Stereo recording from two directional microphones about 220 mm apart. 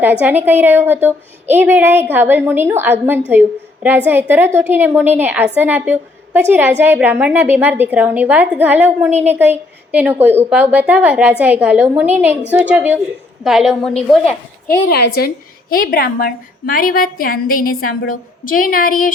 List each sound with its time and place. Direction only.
0.0 s a woman's voice: 5° right (ahead or behind)
14.8 s a woman's voice: 45° left (ahead or behind)